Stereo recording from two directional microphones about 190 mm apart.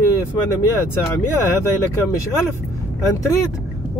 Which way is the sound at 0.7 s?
15° left (ahead or behind).